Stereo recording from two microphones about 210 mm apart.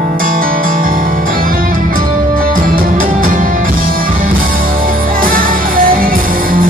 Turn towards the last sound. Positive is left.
turn(degrees=-40)  # may be behind; listen again after turning